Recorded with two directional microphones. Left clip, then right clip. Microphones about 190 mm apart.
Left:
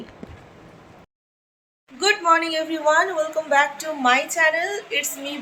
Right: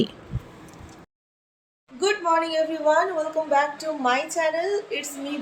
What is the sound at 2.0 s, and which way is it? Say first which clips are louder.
A woman's voice: left 4 dB; centre (ahead or behind).